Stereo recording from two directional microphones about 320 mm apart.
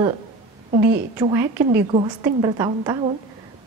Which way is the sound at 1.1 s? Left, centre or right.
Centre.